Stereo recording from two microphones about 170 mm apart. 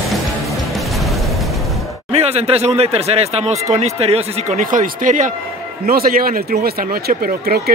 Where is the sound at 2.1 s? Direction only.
40° right (ahead or behind); by 7.7 s 60° right (ahead or behind).